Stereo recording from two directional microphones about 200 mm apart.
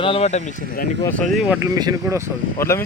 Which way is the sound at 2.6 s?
15° left (ahead or behind).